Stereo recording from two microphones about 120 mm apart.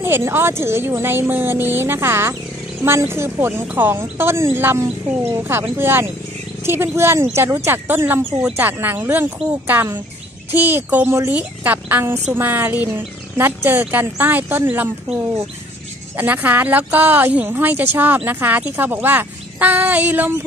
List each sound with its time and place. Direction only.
0.0 s speech: 20° right (ahead or behind)
16.2 s speech: 15° right (ahead or behind)